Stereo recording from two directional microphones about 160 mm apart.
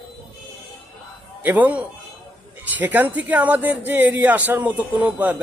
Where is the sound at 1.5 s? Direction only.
10° right (ahead or behind).